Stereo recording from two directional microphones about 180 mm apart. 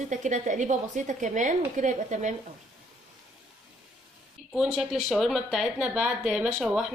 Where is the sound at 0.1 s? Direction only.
45° right (ahead or behind).